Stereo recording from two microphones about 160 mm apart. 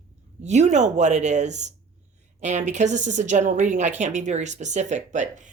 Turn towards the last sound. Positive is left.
turn(degrees=-50)  # may be behind; listen again after turning